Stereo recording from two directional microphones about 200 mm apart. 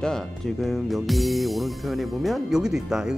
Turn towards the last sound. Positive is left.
turn(degrees=0)  # may be behind; listen again after turning